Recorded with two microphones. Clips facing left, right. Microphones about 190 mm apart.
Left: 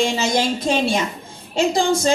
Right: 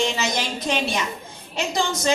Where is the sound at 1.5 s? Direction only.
30° left (ahead or behind).